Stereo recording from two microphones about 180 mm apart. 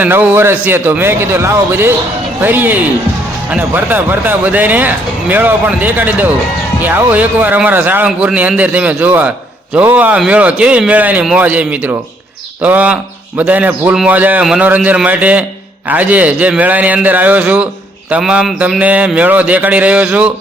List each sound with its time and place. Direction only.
0.0 s speech: 10° right (ahead or behind)